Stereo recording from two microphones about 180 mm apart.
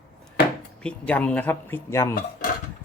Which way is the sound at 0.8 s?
5° left (ahead or behind).